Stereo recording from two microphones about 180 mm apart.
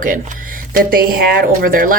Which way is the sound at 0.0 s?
50° right (ahead or behind).